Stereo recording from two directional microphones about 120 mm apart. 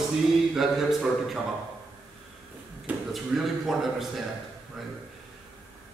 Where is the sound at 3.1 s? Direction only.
Centre (ahead or behind).